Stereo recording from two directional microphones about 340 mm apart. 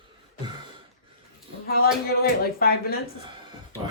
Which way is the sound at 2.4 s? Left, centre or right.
Left.